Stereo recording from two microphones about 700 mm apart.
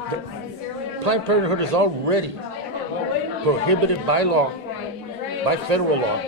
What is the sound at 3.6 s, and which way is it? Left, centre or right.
Speech, right.